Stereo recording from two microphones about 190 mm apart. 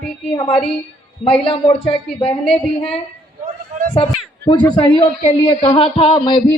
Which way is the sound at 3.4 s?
40° right (ahead or behind).